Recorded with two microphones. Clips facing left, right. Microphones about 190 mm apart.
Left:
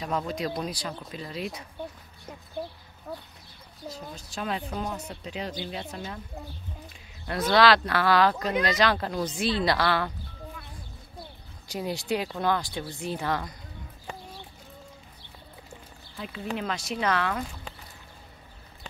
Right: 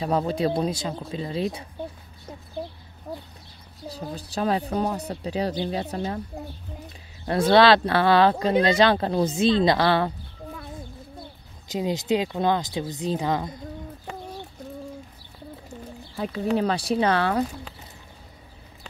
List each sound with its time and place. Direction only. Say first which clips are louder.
0.0 s speech: right 6 dB; 30° right (ahead or behind)
3.1 s speech: right 3 dB; 20° right (ahead or behind)
3.9 s speech: right 9 dB; 35° right (ahead or behind)
7.2 s speech: right 5 dB; 30° right (ahead or behind)
11.7 s speech: right 5 dB; 20° right (ahead or behind)
16.2 s speech: right 9 dB; 40° right (ahead or behind)